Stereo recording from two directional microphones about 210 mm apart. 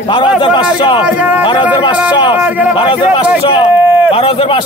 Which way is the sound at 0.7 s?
20° left (ahead or behind).